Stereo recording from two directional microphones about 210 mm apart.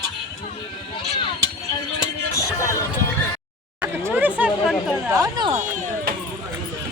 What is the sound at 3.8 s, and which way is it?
Chatter, 10° right (ahead or behind).